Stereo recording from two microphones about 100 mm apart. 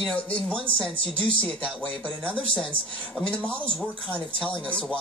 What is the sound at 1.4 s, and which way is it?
Speech, 15° left (ahead or behind).